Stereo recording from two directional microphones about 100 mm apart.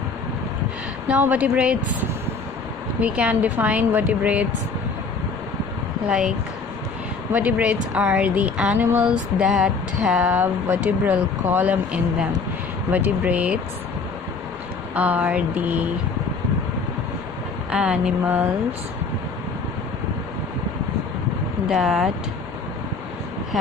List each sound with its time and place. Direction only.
1.0 s music: 15° right (ahead or behind)
3.0 s music: 10° right (ahead or behind)
6.0 s music: 10° right (ahead or behind)
7.3 s music: 15° right (ahead or behind)
10.4 s speech: 20° right (ahead or behind)
12.9 s music: 15° right (ahead or behind)
15.0 s music: 15° right (ahead or behind)
17.6 s music: 10° right (ahead or behind)
21.6 s speech: 5° right (ahead or behind)